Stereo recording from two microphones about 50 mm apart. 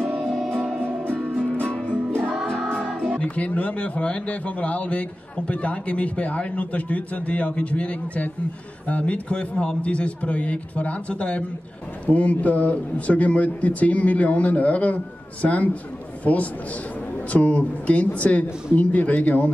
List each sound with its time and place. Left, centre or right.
0.0 s music: right
1.7 s music: left
3.2 s a man's voice: left